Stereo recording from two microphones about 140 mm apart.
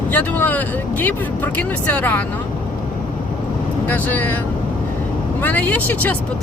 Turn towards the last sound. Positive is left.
turn(degrees=10)  # may be behind; listen again after turning